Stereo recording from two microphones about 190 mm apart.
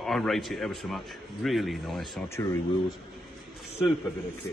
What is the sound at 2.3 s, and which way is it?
Speech, 15° left (ahead or behind).